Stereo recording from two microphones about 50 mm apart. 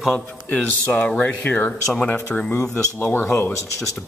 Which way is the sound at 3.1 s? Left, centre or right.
Left.